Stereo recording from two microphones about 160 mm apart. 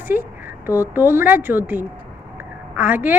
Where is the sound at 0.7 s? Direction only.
20° left (ahead or behind).